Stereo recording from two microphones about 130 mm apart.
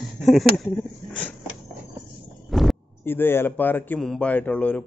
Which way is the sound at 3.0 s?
15° left (ahead or behind).